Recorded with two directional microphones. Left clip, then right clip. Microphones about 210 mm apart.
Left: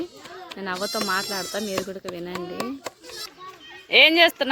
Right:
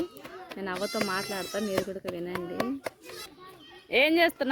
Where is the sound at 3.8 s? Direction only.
5° right (ahead or behind).